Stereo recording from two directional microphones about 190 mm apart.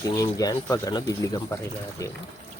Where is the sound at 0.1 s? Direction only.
20° left (ahead or behind).